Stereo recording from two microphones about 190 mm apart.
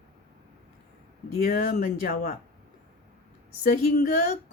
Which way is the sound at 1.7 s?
40° left (ahead or behind).